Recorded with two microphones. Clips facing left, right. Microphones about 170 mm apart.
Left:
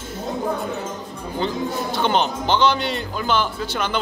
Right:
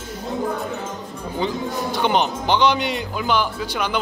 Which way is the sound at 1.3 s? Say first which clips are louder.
Even; 15° right (ahead or behind).